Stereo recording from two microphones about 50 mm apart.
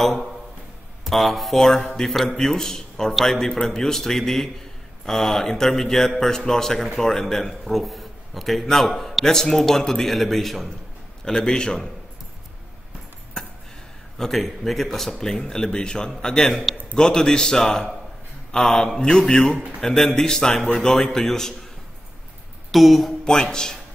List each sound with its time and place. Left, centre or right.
1.0 s a man's voice: centre
11.2 s a man's voice: centre
13.4 s a sound: centre
14.1 s a man's voice: centre
22.7 s speech: centre
23.2 s a man's voice: centre